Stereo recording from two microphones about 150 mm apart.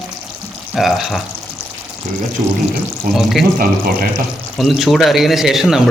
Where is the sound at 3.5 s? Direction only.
75° right (ahead or behind).